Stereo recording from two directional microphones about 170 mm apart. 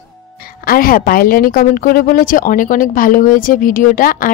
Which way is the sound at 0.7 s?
60° left (ahead or behind).